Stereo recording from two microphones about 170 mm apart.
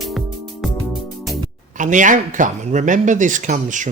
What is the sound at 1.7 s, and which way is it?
Speech, 50° right (ahead or behind).